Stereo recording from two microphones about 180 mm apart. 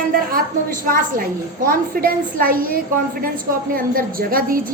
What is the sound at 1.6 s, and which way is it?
A woman's voice, 55° right (ahead or behind).